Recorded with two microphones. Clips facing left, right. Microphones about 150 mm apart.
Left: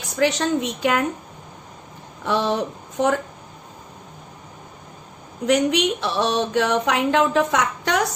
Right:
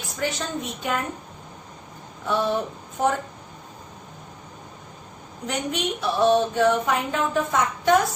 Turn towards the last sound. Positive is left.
turn(degrees=90)